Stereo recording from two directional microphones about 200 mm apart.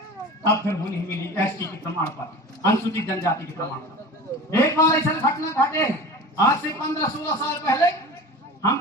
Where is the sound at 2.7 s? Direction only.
15° left (ahead or behind).